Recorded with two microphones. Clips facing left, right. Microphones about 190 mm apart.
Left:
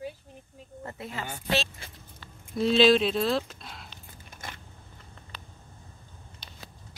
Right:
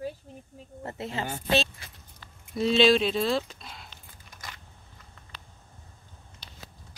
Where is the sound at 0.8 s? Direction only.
30° right (ahead or behind).